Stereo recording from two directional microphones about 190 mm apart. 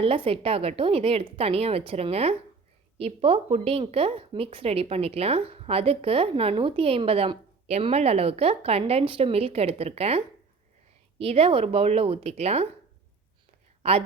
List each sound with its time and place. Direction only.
0.0 s a woman's voice: 30° right (ahead or behind)
13.8 s a woman's voice: 30° right (ahead or behind)